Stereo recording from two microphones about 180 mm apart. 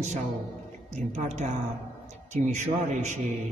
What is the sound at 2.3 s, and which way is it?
Speech, 40° right (ahead or behind).